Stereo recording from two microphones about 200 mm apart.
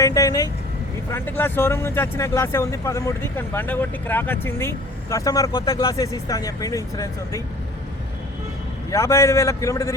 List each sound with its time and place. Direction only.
0.0 s speech: 15° left (ahead or behind)
8.9 s speech: 15° left (ahead or behind)